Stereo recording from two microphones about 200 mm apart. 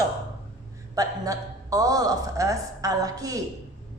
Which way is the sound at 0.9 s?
15° right (ahead or behind).